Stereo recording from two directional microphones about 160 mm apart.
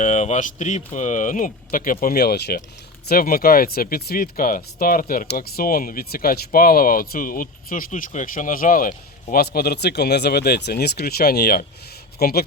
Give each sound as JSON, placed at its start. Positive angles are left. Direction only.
{"t": 0.0, "sound": "speech", "side_deg": 50}
{"t": 3.1, "sound": "speech", "side_deg": 65}